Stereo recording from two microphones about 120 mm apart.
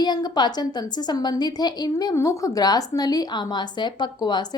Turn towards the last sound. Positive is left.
turn(degrees=35)  # may be behind; listen again after turning